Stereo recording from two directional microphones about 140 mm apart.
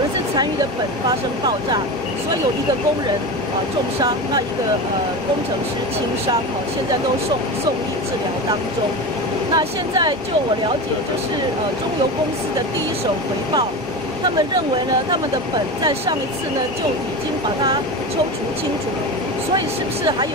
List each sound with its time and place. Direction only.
9.6 s speech: 30° right (ahead or behind)